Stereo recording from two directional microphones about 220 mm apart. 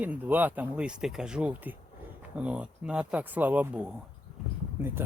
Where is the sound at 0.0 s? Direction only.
5° right (ahead or behind).